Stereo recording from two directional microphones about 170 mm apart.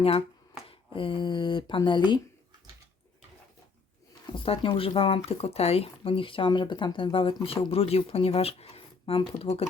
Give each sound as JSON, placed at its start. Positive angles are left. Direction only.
{"t": 0.7, "sound": "speech", "side_deg": 30}
{"t": 4.4, "sound": "speech", "side_deg": 35}